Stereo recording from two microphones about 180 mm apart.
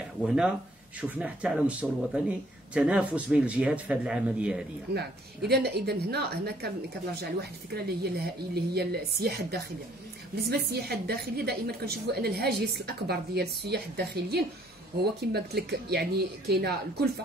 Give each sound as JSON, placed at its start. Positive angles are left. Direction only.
{"t": 0.2, "sound": "speech", "side_deg": -5}
{"t": 4.9, "sound": "a woman's voice", "side_deg": -65}